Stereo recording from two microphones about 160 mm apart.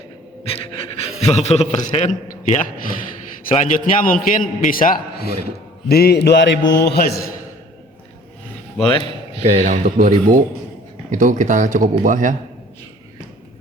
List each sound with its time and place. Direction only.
0.4 s pant: 35° left (ahead or behind)
1.2 s a man's voice: 40° left (ahead or behind); by 5.3 s 70° left (ahead or behind)
5.9 s mantra: 85° left
8.8 s a man's voice: 35° left (ahead or behind)
9.4 s speech: 40° right (ahead or behind)